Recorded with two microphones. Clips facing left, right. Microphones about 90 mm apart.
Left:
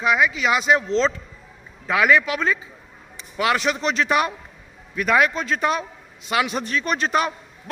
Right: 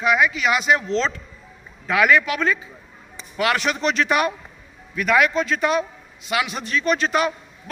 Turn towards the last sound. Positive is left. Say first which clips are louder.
# right 1 dB
turn(degrees=40)  # may be behind; listen again after turning